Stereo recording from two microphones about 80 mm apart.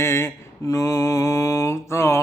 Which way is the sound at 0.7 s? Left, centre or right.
Left.